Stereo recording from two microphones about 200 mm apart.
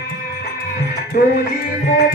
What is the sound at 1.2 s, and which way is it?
Music, 45° left (ahead or behind).